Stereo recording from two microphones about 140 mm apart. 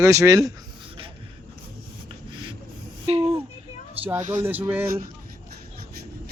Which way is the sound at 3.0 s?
45° right (ahead or behind).